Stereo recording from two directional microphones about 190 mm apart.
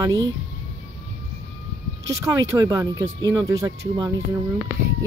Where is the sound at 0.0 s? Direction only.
20° right (ahead or behind).